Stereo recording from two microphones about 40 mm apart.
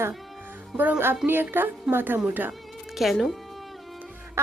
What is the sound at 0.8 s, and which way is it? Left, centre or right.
Speech, right.